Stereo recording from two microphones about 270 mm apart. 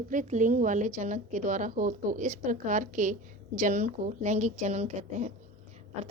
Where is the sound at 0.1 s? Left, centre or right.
Right.